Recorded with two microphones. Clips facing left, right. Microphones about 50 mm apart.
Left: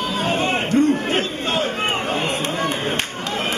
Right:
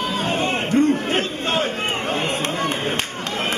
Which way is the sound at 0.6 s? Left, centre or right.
Right.